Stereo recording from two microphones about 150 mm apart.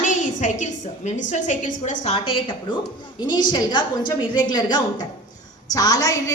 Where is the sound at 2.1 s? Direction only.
40° left (ahead or behind).